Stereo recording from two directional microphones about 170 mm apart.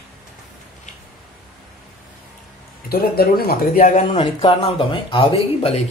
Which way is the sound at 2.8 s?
65° left (ahead or behind).